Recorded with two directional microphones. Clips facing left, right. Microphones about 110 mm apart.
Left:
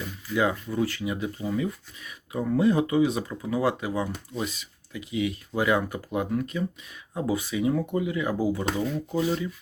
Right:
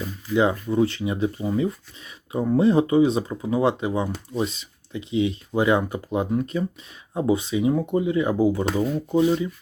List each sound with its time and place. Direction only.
0.0 s speech: 25° right (ahead or behind)